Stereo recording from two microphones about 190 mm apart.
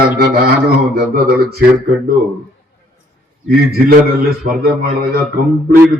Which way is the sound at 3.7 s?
50° right (ahead or behind).